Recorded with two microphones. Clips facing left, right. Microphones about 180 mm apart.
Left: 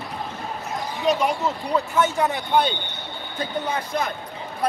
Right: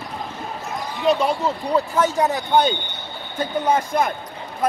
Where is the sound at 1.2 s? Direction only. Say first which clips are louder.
Right 2 dB; 35° right (ahead or behind).